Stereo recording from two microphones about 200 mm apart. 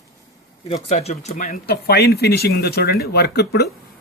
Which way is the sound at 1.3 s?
45° left (ahead or behind).